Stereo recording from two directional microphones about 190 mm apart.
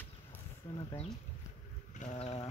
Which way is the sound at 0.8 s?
25° left (ahead or behind).